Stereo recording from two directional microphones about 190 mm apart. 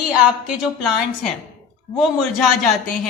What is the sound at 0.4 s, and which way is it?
Speech, 5° right (ahead or behind).